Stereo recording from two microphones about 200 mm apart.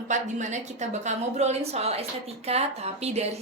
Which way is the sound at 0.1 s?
35° right (ahead or behind).